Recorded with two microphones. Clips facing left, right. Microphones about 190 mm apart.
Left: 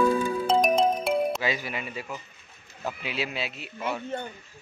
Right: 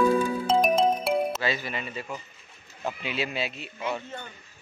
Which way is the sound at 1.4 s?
10° left (ahead or behind).